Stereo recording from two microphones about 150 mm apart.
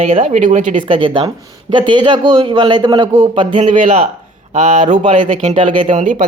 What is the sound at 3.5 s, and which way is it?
Speech, 50° right (ahead or behind).